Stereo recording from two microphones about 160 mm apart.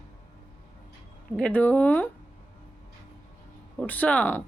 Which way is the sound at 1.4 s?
10° left (ahead or behind).